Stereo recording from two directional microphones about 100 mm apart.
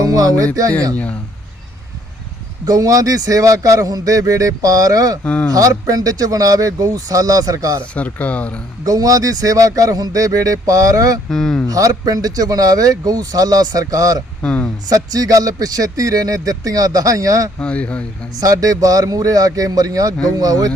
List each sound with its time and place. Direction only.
0.0 s speech: 40° right (ahead or behind)
2.6 s speech: 35° right (ahead or behind)
5.2 s speech: 10° left (ahead or behind)
5.5 s speech: 40° right (ahead or behind)
7.9 s speech: 15° left (ahead or behind)
8.8 s speech: 35° right (ahead or behind)
11.3 s speech: 5° left (ahead or behind)
11.7 s speech: 35° right (ahead or behind)
14.4 s speech: 15° left (ahead or behind)
14.8 s speech: 40° right (ahead or behind)
17.6 s speech: 10° left (ahead or behind)
18.3 s speech: 35° right (ahead or behind)